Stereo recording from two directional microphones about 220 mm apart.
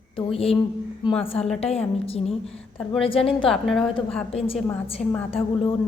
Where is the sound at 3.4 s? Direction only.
Centre (ahead or behind).